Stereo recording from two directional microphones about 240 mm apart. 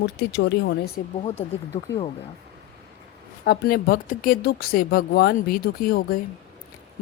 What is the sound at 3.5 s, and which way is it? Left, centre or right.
Speech, left.